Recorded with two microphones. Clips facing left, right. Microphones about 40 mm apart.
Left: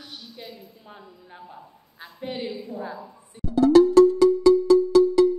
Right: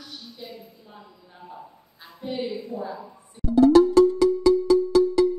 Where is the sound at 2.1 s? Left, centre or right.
Left.